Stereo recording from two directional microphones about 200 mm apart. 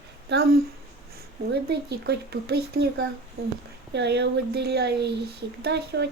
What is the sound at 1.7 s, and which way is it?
Speech, 55° right (ahead or behind).